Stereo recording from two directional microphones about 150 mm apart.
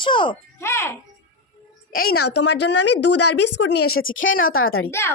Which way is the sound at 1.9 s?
75° left (ahead or behind).